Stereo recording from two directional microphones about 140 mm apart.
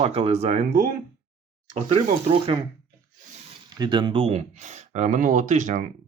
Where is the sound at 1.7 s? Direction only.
55° right (ahead or behind).